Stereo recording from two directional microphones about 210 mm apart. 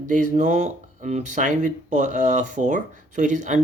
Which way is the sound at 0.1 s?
35° right (ahead or behind).